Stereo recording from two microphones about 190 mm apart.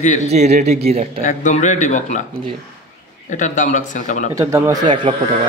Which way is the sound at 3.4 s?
40° left (ahead or behind).